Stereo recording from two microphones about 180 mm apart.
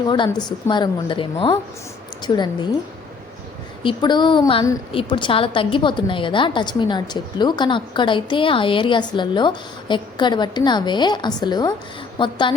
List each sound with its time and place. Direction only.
0.1 s a woman's voice: 25° left (ahead or behind)
3.8 s a woman's voice: 25° left (ahead or behind)